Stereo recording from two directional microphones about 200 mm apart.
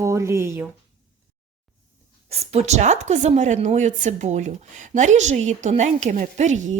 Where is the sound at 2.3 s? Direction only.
30° right (ahead or behind).